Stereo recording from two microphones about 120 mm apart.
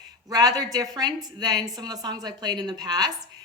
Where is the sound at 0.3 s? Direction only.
30° right (ahead or behind).